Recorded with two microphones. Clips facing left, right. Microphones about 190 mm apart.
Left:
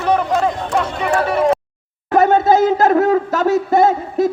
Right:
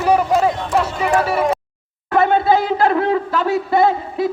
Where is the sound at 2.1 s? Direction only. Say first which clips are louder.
Left 3 dB; 45° left (ahead or behind).